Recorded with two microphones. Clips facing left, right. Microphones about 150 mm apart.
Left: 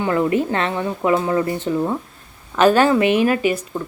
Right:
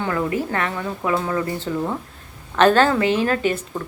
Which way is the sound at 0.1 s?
20° left (ahead or behind).